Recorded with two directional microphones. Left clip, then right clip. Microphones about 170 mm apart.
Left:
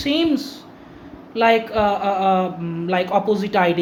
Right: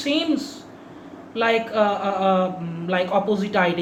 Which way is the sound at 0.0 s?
50° left (ahead or behind).